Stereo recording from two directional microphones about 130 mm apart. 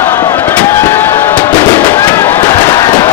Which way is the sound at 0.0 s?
20° left (ahead or behind).